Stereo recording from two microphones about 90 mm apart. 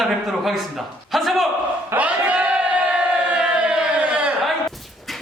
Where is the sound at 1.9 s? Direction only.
15° right (ahead or behind).